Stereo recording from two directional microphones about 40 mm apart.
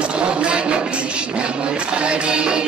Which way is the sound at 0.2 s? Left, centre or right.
Right.